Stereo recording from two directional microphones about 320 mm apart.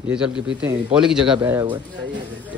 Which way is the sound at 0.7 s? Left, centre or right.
Centre.